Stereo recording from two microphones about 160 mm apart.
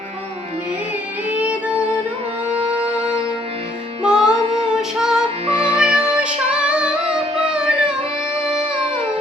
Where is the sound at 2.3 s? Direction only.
40° right (ahead or behind).